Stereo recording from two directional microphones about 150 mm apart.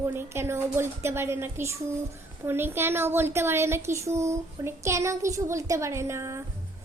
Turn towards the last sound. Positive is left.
turn(degrees=-20)  # may be behind; listen again after turning